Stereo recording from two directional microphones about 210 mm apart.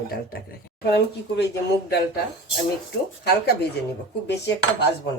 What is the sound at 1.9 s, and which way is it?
Speech, 50° left (ahead or behind).